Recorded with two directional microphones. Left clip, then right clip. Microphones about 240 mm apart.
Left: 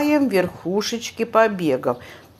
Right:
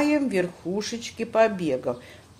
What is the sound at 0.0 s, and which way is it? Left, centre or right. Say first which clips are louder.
Speech: left 5 dB; centre.